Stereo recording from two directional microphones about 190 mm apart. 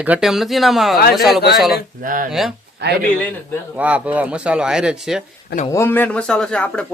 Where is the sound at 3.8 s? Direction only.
5° right (ahead or behind).